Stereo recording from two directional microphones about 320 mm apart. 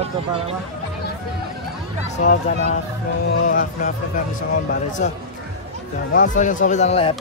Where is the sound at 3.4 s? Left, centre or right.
Left.